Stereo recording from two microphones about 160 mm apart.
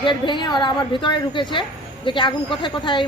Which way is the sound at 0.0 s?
30° left (ahead or behind).